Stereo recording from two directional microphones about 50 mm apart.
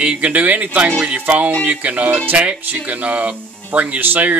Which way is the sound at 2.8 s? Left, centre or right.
Right.